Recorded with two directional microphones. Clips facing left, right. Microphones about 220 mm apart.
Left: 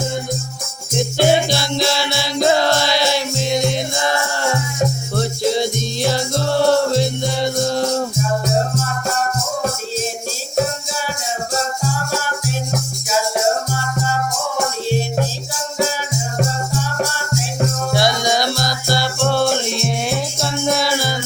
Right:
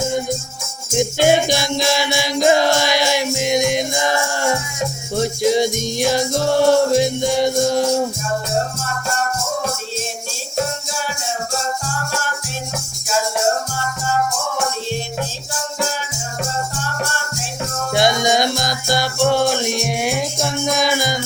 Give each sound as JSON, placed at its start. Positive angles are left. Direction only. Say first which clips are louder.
{"t": 0.9, "sound": "music", "louder": "right 1 dB", "side_deg": -15}
{"t": 17.9, "sound": "music", "louder": "right 3 dB", "side_deg": -20}